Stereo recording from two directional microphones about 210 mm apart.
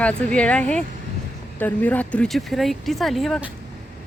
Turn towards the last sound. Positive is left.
turn(degrees=0)  # may be behind; listen again after turning